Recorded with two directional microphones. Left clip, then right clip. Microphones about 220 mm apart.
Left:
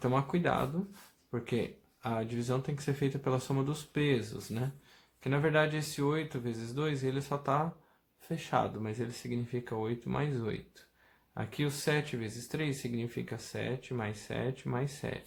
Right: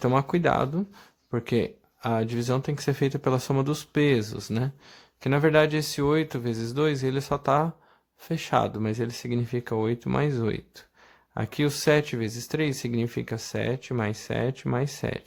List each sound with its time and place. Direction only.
0.0 s speech: 45° right (ahead or behind)